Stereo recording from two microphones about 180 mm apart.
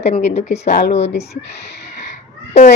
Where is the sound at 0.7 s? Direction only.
65° left (ahead or behind).